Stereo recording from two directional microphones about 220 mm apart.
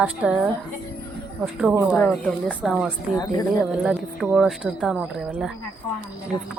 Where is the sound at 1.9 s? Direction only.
5° left (ahead or behind).